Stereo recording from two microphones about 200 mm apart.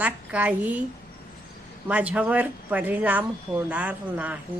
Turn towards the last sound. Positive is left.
turn(degrees=-5)  # may be behind; listen again after turning